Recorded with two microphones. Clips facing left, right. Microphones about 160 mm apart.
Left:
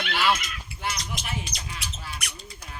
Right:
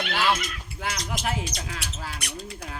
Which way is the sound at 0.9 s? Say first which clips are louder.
Right 4 dB; 90° right.